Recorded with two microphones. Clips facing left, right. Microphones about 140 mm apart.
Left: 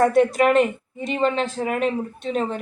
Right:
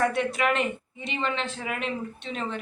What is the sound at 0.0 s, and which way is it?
A man's voice, 40° left (ahead or behind).